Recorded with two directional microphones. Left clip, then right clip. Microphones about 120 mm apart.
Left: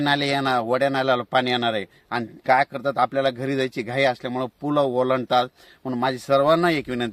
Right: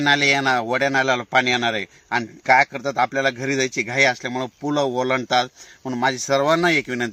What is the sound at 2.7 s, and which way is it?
Speech, centre (ahead or behind).